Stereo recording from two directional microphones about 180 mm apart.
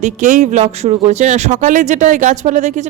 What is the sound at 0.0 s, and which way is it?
Speech, 40° right (ahead or behind).